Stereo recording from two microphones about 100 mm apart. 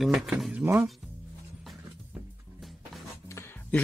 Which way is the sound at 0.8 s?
Centre (ahead or behind).